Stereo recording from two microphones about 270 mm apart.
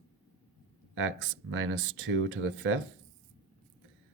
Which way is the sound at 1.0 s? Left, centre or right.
Right.